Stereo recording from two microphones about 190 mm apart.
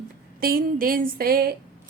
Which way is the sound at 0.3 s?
50° right (ahead or behind).